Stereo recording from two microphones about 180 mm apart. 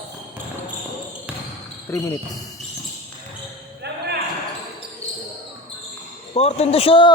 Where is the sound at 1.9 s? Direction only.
15° left (ahead or behind).